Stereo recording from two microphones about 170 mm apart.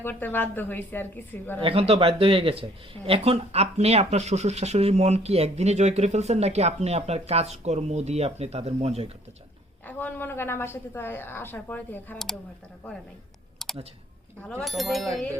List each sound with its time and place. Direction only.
0.0 s a woman's voice: 10° left (ahead or behind)
1.6 s speech: 35° right (ahead or behind)
9.8 s a woman's voice: 10° left (ahead or behind)
13.6 s clicking: centre (ahead or behind)
14.6 s speech: centre (ahead or behind)